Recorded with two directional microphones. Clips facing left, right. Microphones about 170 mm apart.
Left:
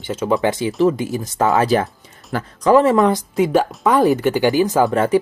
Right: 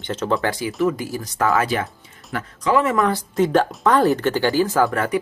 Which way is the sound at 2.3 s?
35° left (ahead or behind).